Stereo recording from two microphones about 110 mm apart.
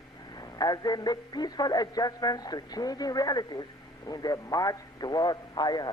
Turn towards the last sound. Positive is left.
turn(degrees=40)  # may be behind; listen again after turning